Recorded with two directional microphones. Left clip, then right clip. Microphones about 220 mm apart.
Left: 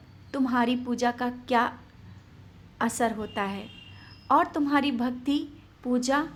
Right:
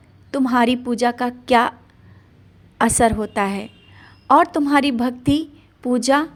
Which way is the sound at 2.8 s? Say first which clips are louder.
Right 11 dB; 35° right (ahead or behind).